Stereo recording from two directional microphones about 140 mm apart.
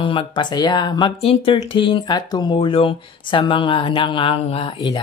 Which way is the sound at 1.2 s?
40° left (ahead or behind).